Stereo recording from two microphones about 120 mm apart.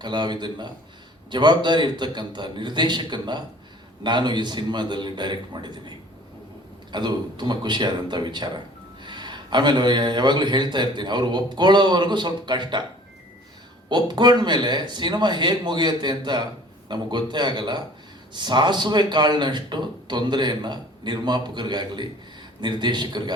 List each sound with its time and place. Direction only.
0.0 s a man's voice: 40° right (ahead or behind)
6.9 s a man's voice: 35° right (ahead or behind)
13.9 s a man's voice: 40° right (ahead or behind)